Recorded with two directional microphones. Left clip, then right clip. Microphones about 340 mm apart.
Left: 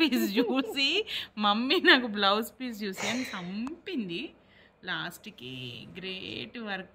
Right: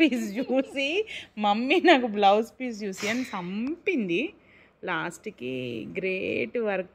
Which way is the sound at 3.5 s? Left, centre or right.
Centre.